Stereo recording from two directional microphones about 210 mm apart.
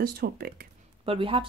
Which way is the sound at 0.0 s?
45° right (ahead or behind).